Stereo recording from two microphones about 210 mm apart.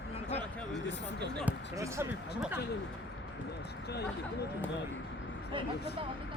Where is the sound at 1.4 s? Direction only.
15° right (ahead or behind).